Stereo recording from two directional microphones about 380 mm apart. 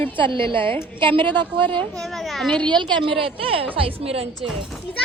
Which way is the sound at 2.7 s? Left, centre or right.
Centre.